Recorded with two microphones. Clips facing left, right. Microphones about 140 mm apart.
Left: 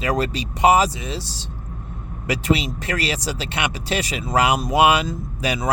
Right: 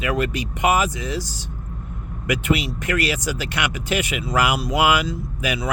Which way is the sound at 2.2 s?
30° left (ahead or behind).